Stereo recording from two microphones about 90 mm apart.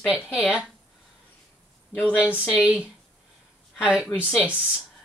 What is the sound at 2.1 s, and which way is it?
Speech, 20° left (ahead or behind).